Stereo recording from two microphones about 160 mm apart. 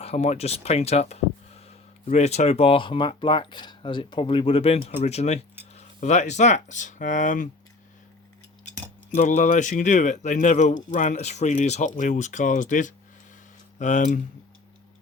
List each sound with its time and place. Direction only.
0.0 s speech: 40° left (ahead or behind)
9.1 s speech: 50° left (ahead or behind)